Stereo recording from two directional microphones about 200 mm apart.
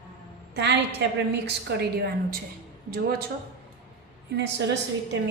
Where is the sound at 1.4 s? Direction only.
55° right (ahead or behind).